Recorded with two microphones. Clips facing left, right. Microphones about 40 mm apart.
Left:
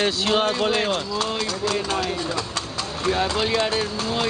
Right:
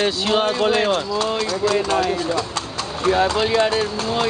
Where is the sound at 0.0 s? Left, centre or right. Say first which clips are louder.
Right 2 dB; centre.